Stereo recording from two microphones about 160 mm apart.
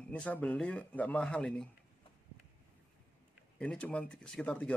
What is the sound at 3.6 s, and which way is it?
Speech, 5° left (ahead or behind).